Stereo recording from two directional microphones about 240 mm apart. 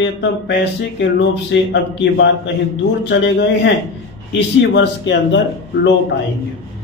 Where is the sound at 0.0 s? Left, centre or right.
Left.